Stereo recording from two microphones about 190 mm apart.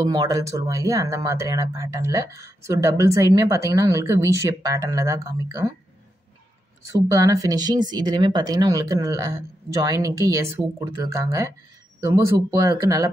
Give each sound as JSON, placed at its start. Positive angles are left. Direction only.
{"t": 0.0, "sound": "speech", "side_deg": -20}
{"t": 6.9, "sound": "speech", "side_deg": -15}